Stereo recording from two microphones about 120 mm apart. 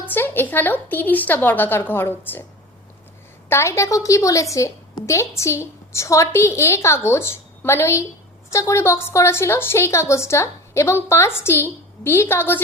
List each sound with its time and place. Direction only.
0.1 s a woman's voice: 15° left (ahead or behind)
3.5 s a woman's voice: 25° left (ahead or behind)